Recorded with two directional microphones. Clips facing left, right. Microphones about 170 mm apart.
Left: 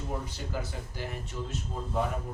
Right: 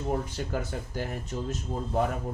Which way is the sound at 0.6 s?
45° right (ahead or behind).